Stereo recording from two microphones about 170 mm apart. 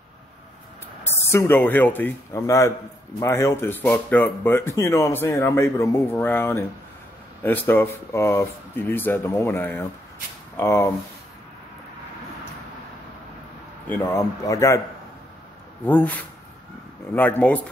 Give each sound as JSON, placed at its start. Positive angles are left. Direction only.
{"t": 1.0, "sound": "speech", "side_deg": 15}
{"t": 13.8, "sound": "speech", "side_deg": 15}
{"t": 15.8, "sound": "speech", "side_deg": 10}